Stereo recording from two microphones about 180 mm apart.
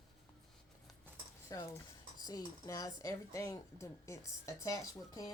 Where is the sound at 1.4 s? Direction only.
20° left (ahead or behind).